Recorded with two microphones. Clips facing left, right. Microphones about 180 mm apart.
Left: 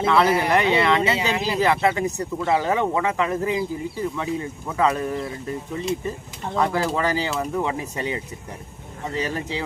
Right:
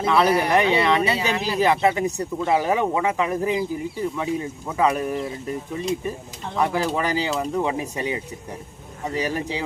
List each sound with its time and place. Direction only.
0.0 s speech: 20° right (ahead or behind)
1.1 s speech: 20° left (ahead or behind)
1.5 s speech: 15° right (ahead or behind)